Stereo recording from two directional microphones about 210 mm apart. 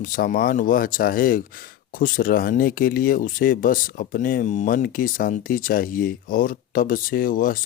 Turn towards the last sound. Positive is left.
turn(degrees=40)  # may be behind; listen again after turning